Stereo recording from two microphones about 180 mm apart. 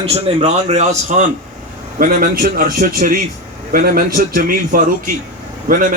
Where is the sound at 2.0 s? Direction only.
50° right (ahead or behind).